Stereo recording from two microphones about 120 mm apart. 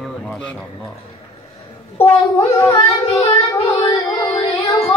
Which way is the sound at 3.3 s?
55° left (ahead or behind).